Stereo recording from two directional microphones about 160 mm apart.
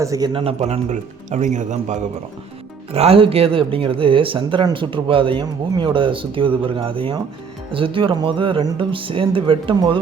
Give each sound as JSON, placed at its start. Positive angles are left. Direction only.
{"t": 0.0, "sound": "speech", "side_deg": -20}
{"t": 0.3, "sound": "speech", "side_deg": -40}
{"t": 2.9, "sound": "speech", "side_deg": -40}